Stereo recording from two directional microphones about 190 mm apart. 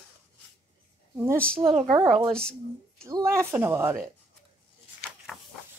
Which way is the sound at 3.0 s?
15° right (ahead or behind).